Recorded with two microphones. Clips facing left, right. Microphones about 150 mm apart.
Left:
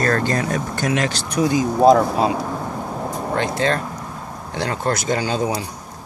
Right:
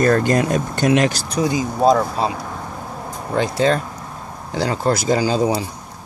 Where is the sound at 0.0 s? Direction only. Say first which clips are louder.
Right 4 dB; 15° right (ahead or behind).